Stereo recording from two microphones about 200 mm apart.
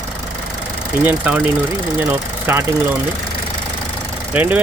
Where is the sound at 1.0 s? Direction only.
10° right (ahead or behind).